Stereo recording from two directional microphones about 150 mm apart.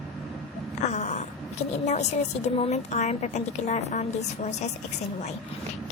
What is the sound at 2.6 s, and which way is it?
A woman's voice, 45° left (ahead or behind).